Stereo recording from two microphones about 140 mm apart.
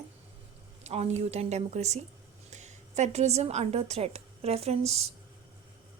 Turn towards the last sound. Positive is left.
turn(degrees=-50)  # may be behind; listen again after turning